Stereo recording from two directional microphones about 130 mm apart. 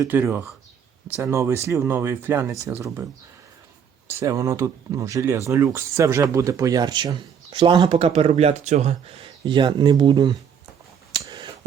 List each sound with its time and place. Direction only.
0.1 s speech: 15° right (ahead or behind)
4.1 s speech: 25° right (ahead or behind)
7.9 s speech: 50° right (ahead or behind)
9.2 s speech: 40° right (ahead or behind)
11.2 s a sound: 35° right (ahead or behind)